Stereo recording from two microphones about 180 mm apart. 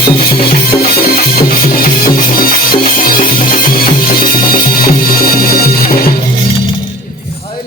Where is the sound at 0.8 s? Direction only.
55° left (ahead or behind).